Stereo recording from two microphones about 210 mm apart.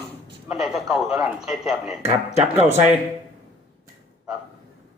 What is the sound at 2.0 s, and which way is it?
Speech, 30° right (ahead or behind).